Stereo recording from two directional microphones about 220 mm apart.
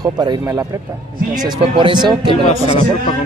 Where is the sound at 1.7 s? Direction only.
20° right (ahead or behind).